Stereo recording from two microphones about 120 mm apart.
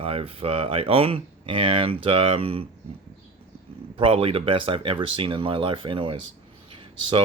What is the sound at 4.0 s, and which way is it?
Speech, 50° right (ahead or behind).